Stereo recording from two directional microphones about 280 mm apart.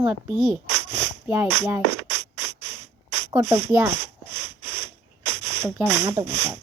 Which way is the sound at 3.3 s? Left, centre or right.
Centre.